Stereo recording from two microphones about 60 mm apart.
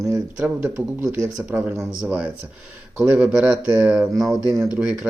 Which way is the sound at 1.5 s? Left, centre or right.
Right.